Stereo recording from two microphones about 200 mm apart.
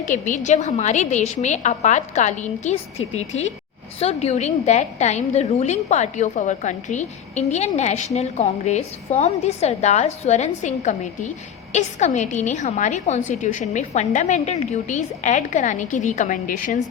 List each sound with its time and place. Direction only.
0.0 s a woman's voice: 40° left (ahead or behind)